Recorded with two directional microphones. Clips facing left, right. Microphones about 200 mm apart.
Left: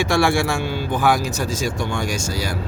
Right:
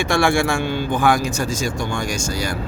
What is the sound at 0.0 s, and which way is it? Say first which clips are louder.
Speech: even; 5° left (ahead or behind).